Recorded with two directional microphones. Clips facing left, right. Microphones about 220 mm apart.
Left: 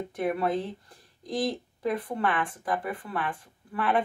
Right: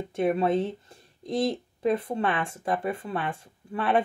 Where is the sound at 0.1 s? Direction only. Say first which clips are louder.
Right 4 dB; 25° right (ahead or behind).